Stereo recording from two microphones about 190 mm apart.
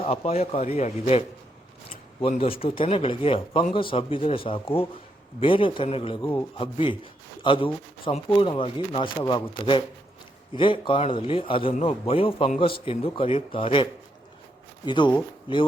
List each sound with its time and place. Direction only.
0.0 s a man's voice: 30° left (ahead or behind)
14.8 s a man's voice: 25° left (ahead or behind)